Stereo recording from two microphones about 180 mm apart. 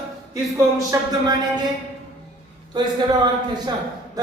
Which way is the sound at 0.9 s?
15° right (ahead or behind).